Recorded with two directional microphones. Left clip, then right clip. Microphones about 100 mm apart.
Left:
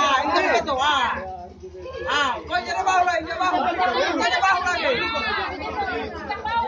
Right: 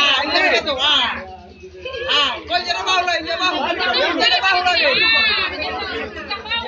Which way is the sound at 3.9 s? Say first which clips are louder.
Right 5 dB; 30° left (ahead or behind).